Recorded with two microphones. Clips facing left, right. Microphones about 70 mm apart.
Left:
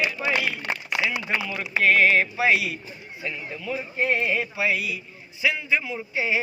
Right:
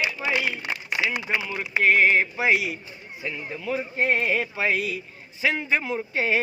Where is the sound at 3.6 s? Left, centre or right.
Right.